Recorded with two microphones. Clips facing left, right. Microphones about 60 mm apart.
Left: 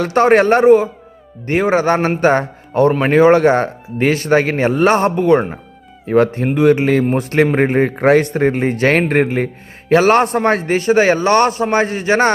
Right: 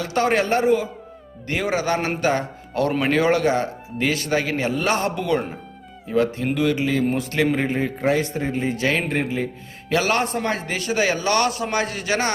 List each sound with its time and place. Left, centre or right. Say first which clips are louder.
0.0 s a man's voice: left 9 dB; left
9.9 s speech: left 9 dB; left